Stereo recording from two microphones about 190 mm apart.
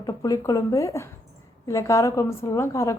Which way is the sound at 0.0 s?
20° left (ahead or behind).